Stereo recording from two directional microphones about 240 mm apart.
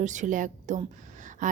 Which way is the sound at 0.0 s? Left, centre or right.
Right.